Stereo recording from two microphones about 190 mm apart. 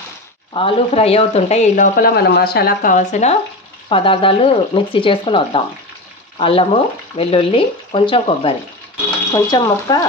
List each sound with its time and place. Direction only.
0.5 s speech: 30° left (ahead or behind)
3.9 s speech: 30° left (ahead or behind)
6.3 s frying: 30° left (ahead or behind)
7.2 s speech: 30° left (ahead or behind)